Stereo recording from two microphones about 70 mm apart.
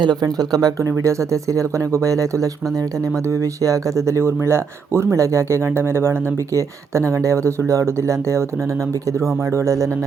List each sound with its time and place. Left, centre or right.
0.0 s speech: right
0.8 s speech: right